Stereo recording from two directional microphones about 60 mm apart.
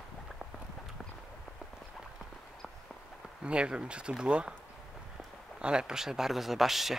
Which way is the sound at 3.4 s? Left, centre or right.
Centre.